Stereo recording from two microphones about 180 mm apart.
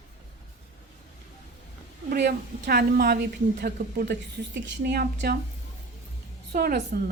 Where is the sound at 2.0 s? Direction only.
60° right (ahead or behind).